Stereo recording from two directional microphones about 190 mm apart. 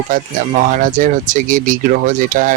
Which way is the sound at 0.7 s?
45° right (ahead or behind).